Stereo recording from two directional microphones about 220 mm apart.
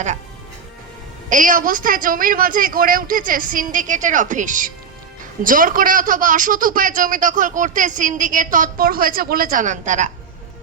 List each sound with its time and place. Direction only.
1.3 s speech: 35° right (ahead or behind)